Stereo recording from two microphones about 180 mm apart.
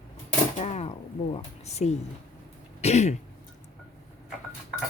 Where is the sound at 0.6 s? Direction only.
35° left (ahead or behind).